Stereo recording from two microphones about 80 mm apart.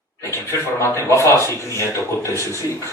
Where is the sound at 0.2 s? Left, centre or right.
Left.